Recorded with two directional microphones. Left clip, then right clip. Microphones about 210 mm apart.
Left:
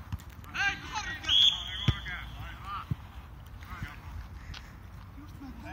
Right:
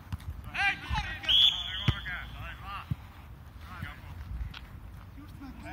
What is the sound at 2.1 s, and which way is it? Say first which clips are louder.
Basketball bounce: right 2 dB; 25° right (ahead or behind).